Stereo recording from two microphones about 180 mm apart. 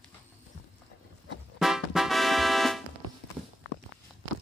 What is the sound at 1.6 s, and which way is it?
Music, centre (ahead or behind).